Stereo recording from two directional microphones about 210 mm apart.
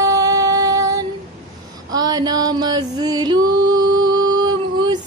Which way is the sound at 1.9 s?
20° right (ahead or behind).